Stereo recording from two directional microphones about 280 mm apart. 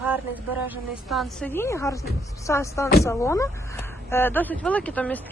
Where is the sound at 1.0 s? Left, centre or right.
Centre.